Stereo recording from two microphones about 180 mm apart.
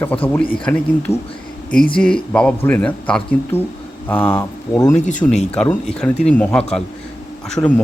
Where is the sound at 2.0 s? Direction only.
5° left (ahead or behind).